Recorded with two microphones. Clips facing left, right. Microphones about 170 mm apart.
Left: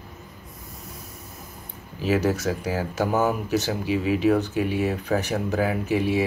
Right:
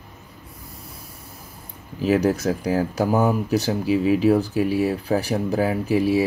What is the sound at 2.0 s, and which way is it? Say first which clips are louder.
Speech: right 3 dB; 40° right (ahead or behind).